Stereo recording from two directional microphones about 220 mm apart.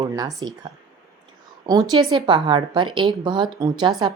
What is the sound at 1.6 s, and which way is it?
A woman's voice, 15° right (ahead or behind).